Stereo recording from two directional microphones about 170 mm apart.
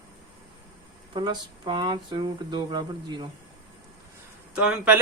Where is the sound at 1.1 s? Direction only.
25° right (ahead or behind).